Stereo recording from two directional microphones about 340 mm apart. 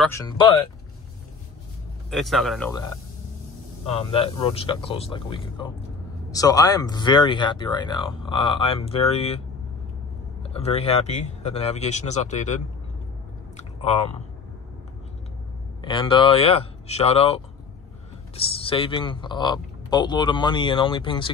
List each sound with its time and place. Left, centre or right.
0.0 s speech: centre
2.0 s speech: centre
3.8 s speech: centre
10.5 s speech: centre
13.6 s chewing: centre
15.8 s speech: centre